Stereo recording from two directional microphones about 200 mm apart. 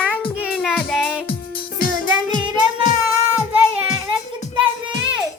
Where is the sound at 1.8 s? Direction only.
45° left (ahead or behind).